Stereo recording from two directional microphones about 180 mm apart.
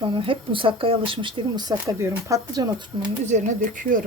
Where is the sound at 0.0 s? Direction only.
30° right (ahead or behind).